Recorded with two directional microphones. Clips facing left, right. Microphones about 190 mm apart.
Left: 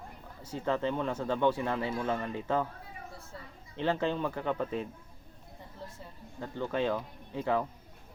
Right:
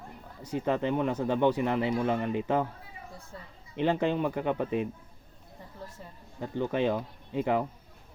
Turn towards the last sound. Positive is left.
turn(degrees=-15)  # may be behind; listen again after turning